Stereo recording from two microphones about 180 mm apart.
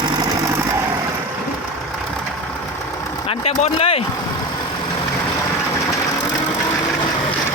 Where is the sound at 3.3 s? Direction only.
35° left (ahead or behind).